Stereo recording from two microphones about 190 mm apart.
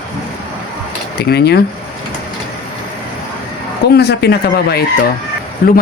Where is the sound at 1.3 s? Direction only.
55° left (ahead or behind).